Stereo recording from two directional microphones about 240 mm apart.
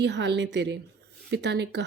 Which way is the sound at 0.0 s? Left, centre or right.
Right.